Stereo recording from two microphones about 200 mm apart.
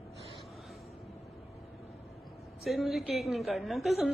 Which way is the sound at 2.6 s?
Centre (ahead or behind).